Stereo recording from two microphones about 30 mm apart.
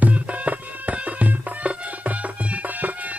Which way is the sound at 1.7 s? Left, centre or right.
Right.